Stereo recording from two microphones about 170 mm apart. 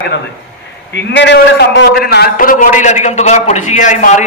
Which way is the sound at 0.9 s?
90° left.